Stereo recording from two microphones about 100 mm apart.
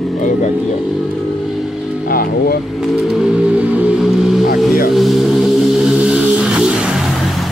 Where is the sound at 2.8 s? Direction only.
5° right (ahead or behind).